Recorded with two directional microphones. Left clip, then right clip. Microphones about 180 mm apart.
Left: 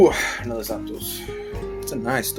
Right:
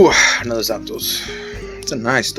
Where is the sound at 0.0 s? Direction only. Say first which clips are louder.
Right 6 dB; 55° right (ahead or behind).